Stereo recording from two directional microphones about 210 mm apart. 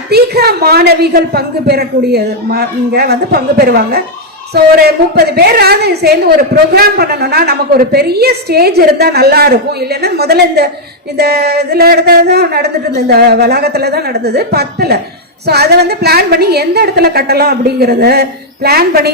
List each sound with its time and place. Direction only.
0.1 s a woman's voice: 50° right (ahead or behind)